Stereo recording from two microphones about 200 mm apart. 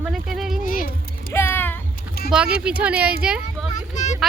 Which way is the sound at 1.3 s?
10° left (ahead or behind).